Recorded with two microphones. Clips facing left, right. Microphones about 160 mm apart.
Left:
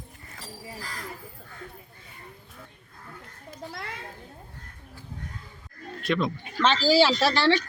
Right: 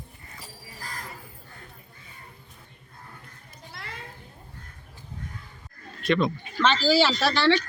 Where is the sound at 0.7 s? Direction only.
45° right (ahead or behind).